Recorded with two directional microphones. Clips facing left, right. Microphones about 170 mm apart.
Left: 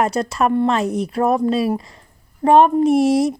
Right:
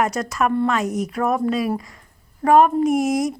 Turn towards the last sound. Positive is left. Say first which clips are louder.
# left 4 dB
turn(degrees=30)  # may be behind; listen again after turning